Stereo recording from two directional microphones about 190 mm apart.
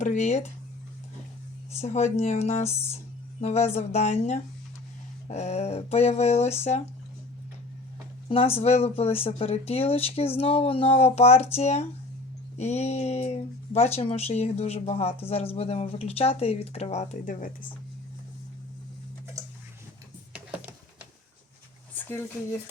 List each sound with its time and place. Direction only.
0.0 s speech: 40° left (ahead or behind)
1.8 s speech: 35° left (ahead or behind)
8.3 s speech: 30° left (ahead or behind)
21.9 s a sound: 10° left (ahead or behind)